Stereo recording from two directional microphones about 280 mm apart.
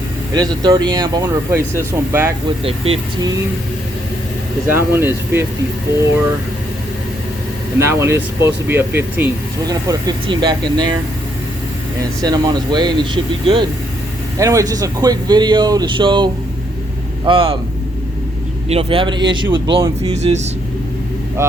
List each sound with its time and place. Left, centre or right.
0.3 s speech: centre
2.6 s speech: right
4.7 s speech: centre
7.8 s speech: centre
12.2 s speech: centre
18.7 s speech: centre